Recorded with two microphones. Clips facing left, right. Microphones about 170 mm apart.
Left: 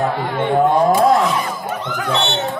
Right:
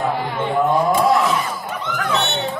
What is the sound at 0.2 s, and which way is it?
Speech, 55° left (ahead or behind).